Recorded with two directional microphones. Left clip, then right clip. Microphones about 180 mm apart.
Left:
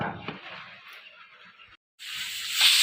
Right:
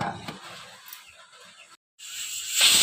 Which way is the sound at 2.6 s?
30° right (ahead or behind).